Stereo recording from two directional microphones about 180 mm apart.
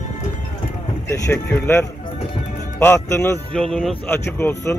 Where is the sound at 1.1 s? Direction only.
15° left (ahead or behind).